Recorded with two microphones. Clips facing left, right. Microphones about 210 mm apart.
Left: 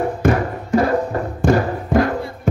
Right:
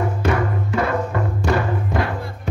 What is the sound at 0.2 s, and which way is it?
Music, 40° left (ahead or behind).